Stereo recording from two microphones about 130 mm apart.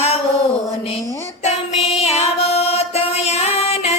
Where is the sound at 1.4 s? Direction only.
55° left (ahead or behind).